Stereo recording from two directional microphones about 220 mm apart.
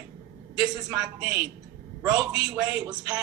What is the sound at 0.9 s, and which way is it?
A man's voice, 5° right (ahead or behind).